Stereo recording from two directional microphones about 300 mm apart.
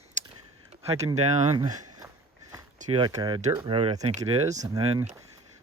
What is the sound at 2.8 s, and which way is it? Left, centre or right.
Speech, centre.